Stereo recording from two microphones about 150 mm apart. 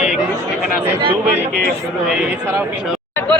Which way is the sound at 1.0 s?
35° right (ahead or behind).